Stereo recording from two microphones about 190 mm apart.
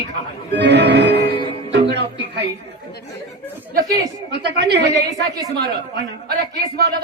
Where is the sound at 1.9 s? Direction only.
65° right (ahead or behind).